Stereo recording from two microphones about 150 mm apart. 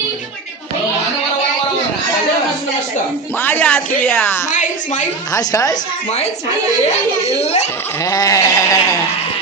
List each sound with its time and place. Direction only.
3.3 s speech: 15° left (ahead or behind)
5.3 s sheep: 25° left (ahead or behind)
7.3 s a child's voice: 45° left (ahead or behind)
8.0 s sheep: 25° left (ahead or behind)